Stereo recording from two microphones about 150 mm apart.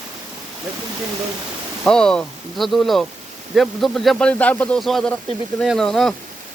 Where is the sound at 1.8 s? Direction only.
5° left (ahead or behind).